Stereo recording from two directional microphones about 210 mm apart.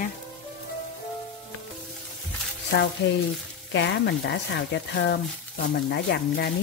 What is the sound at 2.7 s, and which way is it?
Speech, 60° left (ahead or behind).